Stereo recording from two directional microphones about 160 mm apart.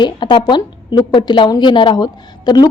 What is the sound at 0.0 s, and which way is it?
A woman's voice, 30° left (ahead or behind).